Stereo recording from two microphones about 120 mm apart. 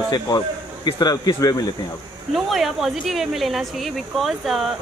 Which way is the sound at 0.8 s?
35° left (ahead or behind).